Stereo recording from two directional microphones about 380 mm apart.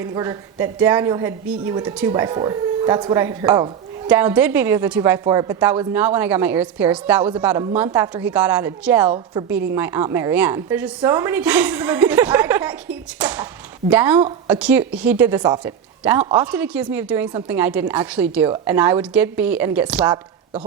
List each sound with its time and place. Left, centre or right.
0.0 s a woman's voice: centre